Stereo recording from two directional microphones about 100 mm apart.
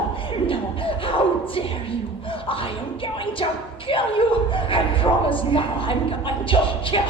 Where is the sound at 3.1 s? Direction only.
60° left (ahead or behind).